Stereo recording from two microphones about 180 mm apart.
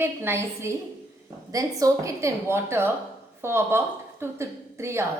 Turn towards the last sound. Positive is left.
turn(degrees=-15)  # may be behind; listen again after turning